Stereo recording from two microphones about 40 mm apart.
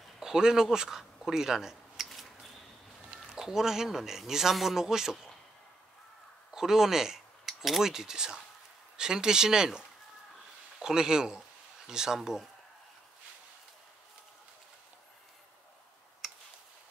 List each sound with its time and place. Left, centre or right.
0.2 s speech: centre
2.0 s a sound: centre
3.3 s a man's voice: centre
6.5 s a man's voice: centre
7.4 s a sound: centre
7.8 s a man's voice: centre
16.2 s tick: centre